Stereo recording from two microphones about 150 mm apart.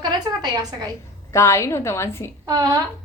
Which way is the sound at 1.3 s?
20° left (ahead or behind).